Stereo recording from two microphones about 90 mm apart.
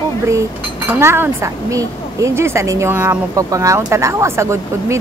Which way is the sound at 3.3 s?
35° right (ahead or behind).